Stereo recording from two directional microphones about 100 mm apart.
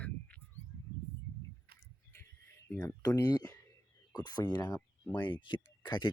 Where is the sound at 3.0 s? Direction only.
35° left (ahead or behind).